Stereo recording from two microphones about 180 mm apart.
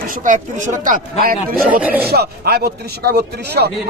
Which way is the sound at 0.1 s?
45° right (ahead or behind).